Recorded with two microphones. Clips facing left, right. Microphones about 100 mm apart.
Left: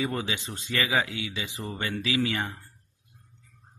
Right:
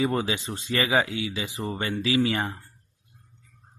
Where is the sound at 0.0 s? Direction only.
35° right (ahead or behind).